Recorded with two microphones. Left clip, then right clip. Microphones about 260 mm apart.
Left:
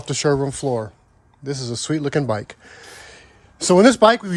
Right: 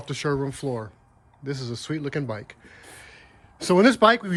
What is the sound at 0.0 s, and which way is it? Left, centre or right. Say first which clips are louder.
Speech: left 7 dB; centre.